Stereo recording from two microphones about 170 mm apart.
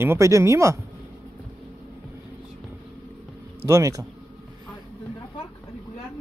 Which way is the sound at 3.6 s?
20° right (ahead or behind).